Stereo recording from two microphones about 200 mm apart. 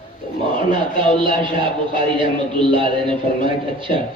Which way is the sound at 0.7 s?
25° right (ahead or behind).